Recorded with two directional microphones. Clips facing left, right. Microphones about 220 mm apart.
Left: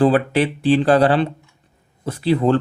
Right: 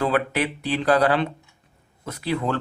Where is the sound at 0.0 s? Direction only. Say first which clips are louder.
Left 7 dB; 30° left (ahead or behind).